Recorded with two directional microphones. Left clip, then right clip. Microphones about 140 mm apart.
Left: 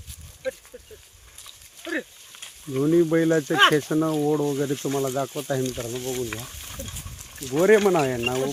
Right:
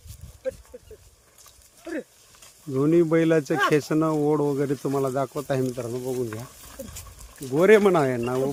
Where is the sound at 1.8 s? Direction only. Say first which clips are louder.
Left 4 dB; 25° right (ahead or behind).